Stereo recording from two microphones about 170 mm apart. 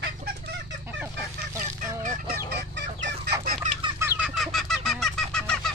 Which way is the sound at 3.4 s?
55° right (ahead or behind).